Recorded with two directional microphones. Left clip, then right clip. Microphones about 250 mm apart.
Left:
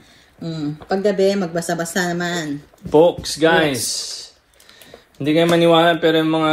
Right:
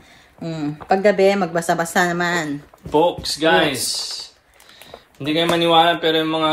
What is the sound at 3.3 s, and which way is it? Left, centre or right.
Speech, centre.